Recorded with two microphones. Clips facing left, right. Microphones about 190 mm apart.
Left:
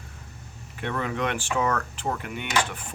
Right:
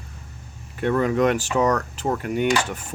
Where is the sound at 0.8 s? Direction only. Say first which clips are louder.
Right 9 dB; 45° right (ahead or behind).